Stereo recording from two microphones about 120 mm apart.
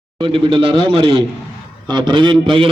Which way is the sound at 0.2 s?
45° right (ahead or behind).